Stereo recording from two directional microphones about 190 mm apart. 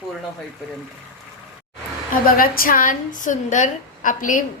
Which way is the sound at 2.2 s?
50° left (ahead or behind).